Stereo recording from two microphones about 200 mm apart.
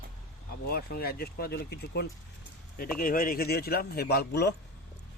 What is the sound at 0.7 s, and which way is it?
Speech, 50° left (ahead or behind).